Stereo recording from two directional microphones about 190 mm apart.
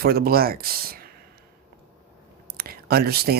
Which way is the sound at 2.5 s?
55° right (ahead or behind).